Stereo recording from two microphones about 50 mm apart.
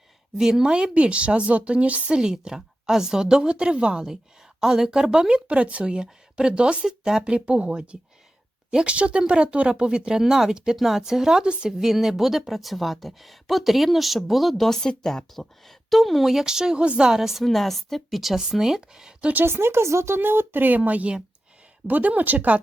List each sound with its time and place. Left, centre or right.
0.3 s speech: centre; by 2.1 s right
2.1 s speech: centre
17.1 s speech: centre
17.4 s speech: centre
19.5 s speech: right